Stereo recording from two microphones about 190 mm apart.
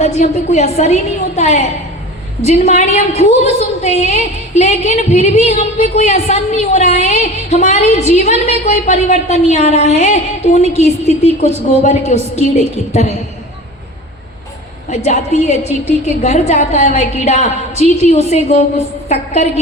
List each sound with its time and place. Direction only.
0.0 s a woman's voice: 35° left (ahead or behind)
2.6 s a woman's voice: 35° left (ahead or behind)
14.8 s a woman's voice: 40° left (ahead or behind)
15.5 s a woman's voice: 35° right (ahead or behind)
16.0 s a woman's voice: 35° left (ahead or behind)